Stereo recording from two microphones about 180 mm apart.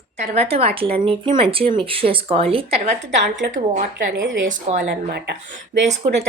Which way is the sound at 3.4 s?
65° right (ahead or behind).